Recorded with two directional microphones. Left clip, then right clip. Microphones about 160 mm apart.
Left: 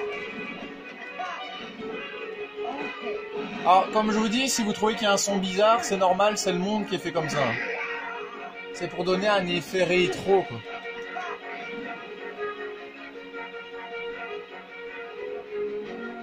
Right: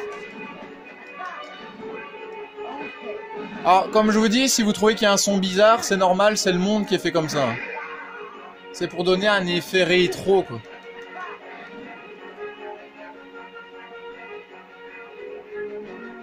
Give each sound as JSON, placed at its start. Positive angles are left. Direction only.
{"t": 3.6, "sound": "a man's voice", "side_deg": -45}
{"t": 8.7, "sound": "a man's voice", "side_deg": -40}